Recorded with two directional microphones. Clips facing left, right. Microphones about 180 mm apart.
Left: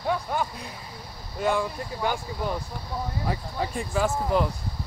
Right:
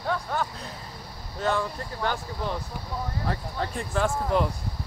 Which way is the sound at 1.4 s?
10° left (ahead or behind).